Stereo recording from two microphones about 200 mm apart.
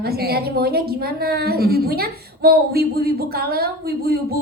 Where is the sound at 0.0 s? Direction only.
50° right (ahead or behind).